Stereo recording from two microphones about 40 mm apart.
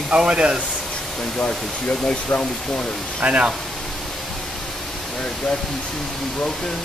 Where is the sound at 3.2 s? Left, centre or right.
Right.